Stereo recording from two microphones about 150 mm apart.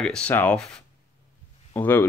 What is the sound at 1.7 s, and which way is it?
Speech, 15° left (ahead or behind).